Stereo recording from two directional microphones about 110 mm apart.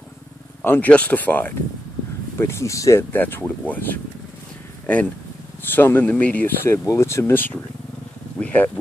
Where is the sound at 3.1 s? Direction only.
15° left (ahead or behind).